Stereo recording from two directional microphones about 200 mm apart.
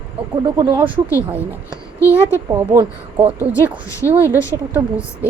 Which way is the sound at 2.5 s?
10° right (ahead or behind).